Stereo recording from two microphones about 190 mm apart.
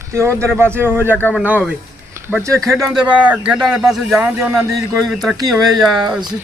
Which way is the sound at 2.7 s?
Centre (ahead or behind).